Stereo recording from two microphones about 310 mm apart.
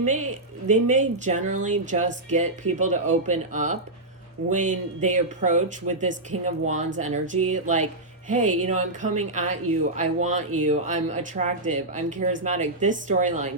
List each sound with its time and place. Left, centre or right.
0.1 s speech: right